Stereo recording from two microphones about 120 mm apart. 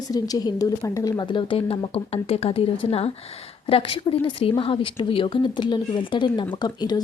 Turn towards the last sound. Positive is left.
turn(degrees=35)  # may be behind; listen again after turning